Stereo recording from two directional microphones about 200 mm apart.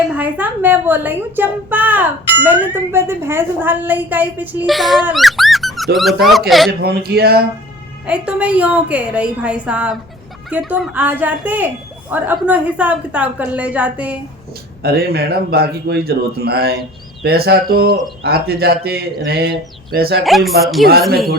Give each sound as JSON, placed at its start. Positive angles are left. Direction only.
{"t": 0.2, "sound": "a woman's voice", "side_deg": -10}
{"t": 6.7, "sound": "speech", "side_deg": -50}
{"t": 8.0, "sound": "a woman's voice", "side_deg": -5}
{"t": 14.8, "sound": "speech", "side_deg": -50}
{"t": 20.2, "sound": "speech", "side_deg": 0}